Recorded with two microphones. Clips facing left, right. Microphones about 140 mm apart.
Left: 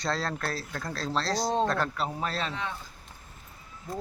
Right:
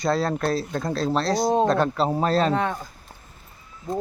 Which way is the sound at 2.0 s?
40° right (ahead or behind).